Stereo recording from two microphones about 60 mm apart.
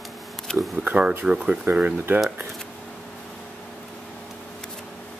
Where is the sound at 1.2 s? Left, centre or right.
Centre.